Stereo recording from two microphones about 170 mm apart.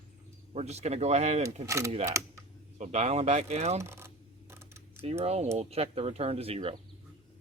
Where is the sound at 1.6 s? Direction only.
20° right (ahead or behind).